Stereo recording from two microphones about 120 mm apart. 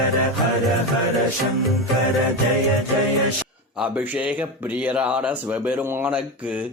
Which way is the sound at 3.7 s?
10° right (ahead or behind).